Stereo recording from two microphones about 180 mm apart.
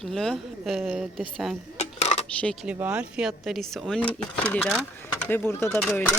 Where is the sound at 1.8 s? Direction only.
35° left (ahead or behind).